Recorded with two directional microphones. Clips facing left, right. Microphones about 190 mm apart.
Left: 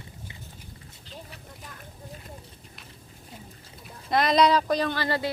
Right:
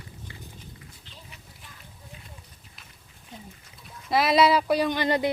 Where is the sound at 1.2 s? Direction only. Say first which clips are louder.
Left 5 dB; 40° left (ahead or behind).